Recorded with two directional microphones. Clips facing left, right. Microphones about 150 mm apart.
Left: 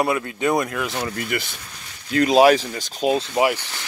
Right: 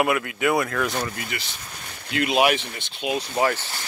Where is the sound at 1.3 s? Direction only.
50° left (ahead or behind).